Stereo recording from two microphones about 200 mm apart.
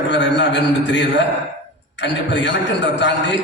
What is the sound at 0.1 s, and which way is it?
Speech, 60° left (ahead or behind).